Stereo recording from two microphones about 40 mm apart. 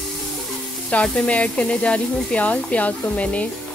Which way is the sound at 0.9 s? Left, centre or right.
Left.